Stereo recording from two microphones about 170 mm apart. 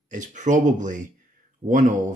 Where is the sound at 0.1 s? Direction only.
45° right (ahead or behind).